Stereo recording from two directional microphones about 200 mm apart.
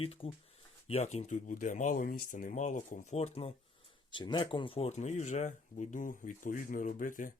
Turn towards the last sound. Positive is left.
turn(degrees=40)  # may be behind; listen again after turning